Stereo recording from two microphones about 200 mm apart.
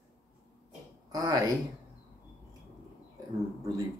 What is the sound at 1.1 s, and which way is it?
Speech, 15° right (ahead or behind).